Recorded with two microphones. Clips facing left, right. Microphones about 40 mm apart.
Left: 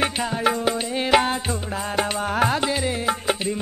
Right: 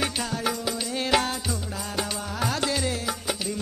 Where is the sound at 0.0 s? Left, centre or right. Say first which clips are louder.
Left 6 dB; left.